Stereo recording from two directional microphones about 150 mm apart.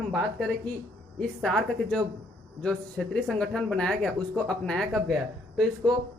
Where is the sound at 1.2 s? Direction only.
Centre (ahead or behind).